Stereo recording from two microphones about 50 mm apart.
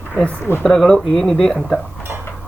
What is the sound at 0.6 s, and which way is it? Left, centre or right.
Speech, centre.